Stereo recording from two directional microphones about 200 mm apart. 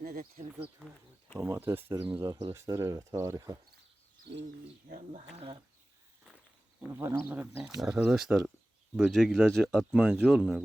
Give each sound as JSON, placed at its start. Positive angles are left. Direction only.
{"t": 0.0, "sound": "speech", "side_deg": -50}
{"t": 1.4, "sound": "speech", "side_deg": -10}
{"t": 4.3, "sound": "speech", "side_deg": -60}
{"t": 4.9, "sound": "speech", "side_deg": -40}
{"t": 6.9, "sound": "speech", "side_deg": -10}